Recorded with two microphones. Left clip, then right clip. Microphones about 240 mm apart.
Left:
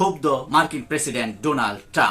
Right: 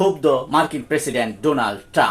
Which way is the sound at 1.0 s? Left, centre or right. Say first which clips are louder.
Right 4 dB; centre.